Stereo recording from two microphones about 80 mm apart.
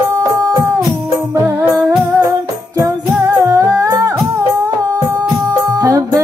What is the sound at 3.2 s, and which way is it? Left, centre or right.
Music, right.